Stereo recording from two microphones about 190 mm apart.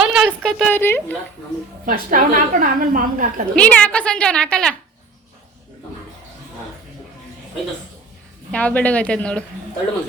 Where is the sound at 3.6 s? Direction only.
5° left (ahead or behind).